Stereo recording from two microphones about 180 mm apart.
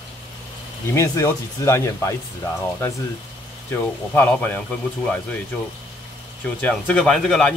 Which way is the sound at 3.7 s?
10° left (ahead or behind).